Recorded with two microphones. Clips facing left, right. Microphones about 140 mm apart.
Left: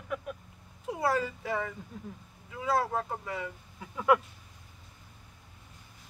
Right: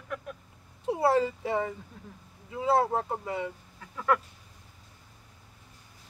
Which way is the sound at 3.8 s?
10° left (ahead or behind).